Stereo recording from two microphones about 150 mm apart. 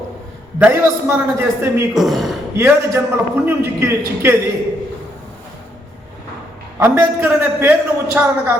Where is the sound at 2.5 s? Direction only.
15° right (ahead or behind).